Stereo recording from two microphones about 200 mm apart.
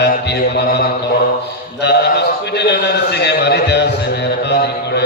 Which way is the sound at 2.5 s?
55° left (ahead or behind).